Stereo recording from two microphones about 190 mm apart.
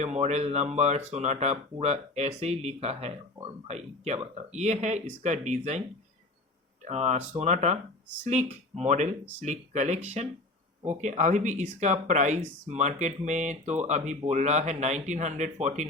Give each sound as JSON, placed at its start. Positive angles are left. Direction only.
{"t": 0.0, "sound": "speech", "side_deg": -35}
{"t": 6.8, "sound": "speech", "side_deg": -35}